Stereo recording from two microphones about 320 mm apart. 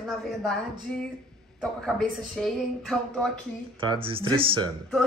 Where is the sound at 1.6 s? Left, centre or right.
Centre.